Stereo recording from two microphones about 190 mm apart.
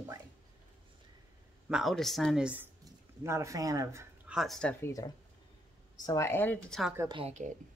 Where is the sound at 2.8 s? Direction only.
15° right (ahead or behind).